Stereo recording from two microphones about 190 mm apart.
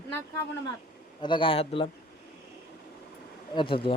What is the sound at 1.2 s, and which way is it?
Speech, 25° left (ahead or behind).